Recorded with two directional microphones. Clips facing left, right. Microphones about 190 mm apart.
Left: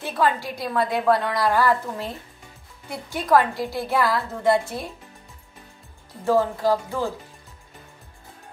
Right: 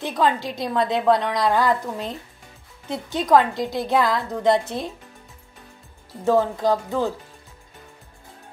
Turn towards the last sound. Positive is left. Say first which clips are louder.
# right 1 dB
turn(degrees=-20)  # may be behind; listen again after turning